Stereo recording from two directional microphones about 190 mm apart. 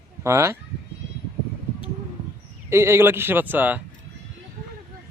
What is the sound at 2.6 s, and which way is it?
A man's voice, 15° right (ahead or behind).